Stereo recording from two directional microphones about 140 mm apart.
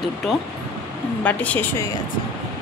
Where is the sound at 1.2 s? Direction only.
10° left (ahead or behind).